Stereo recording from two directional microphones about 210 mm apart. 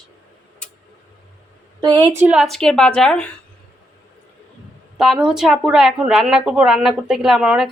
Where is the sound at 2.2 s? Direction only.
5° right (ahead or behind).